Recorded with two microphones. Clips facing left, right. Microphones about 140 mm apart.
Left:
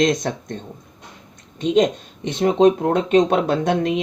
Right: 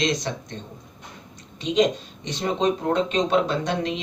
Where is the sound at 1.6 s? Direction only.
50° left (ahead or behind).